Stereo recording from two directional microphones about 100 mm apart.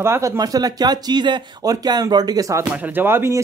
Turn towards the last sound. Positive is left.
turn(degrees=-25)  # may be behind; listen again after turning